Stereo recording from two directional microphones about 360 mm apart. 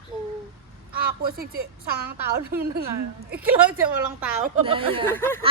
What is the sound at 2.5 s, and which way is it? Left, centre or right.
Speech, right.